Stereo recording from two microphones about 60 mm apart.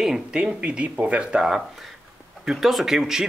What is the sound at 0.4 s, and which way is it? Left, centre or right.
Speech, centre.